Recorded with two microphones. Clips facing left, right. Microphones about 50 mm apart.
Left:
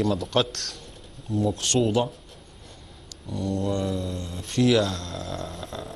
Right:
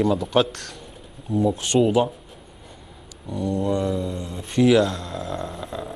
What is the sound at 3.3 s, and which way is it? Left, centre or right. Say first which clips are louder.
Mantra: right 4 dB; centre.